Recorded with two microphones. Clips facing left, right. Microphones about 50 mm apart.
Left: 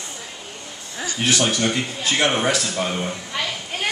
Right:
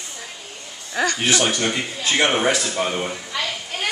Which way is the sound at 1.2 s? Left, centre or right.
Centre.